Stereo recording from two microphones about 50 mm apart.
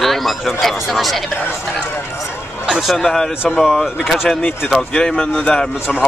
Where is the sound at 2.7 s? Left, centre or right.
Centre.